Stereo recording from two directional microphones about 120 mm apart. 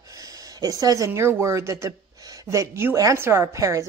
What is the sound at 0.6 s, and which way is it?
A woman's voice, 30° right (ahead or behind).